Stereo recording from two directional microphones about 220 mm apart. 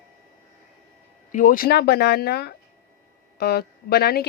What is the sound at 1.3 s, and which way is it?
Speech, 35° left (ahead or behind).